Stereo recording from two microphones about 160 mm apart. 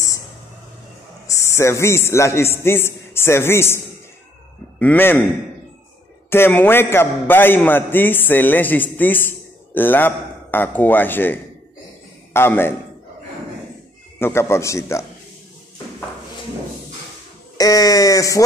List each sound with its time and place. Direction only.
1.2 s a man's voice: 20° left (ahead or behind)
6.3 s a man's voice: 15° left (ahead or behind)
14.2 s a man's voice: 15° left (ahead or behind)
17.6 s speech: 20° left (ahead or behind)